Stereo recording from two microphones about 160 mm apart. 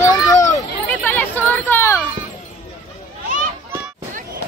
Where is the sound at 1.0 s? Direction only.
10° left (ahead or behind).